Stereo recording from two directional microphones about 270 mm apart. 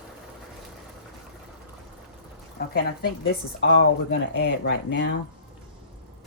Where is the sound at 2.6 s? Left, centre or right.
Left.